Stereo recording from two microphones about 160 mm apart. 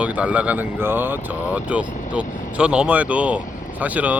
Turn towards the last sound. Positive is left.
turn(degrees=-10)  # may be behind; listen again after turning